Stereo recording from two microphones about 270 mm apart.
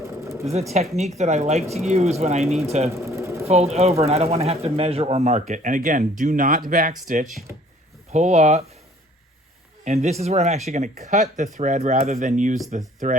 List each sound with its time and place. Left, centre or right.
0.7 s speech: right
2.9 s sewing machine: centre
3.4 s speech: right
9.8 s speech: right